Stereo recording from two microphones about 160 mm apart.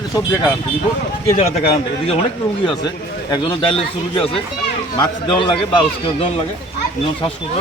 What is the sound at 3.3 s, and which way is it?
Speech, 35° left (ahead or behind).